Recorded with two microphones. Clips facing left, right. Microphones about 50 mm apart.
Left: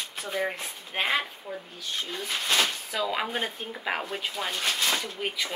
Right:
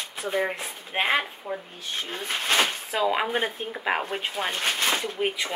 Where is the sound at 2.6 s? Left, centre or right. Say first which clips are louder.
Right 4 dB; right.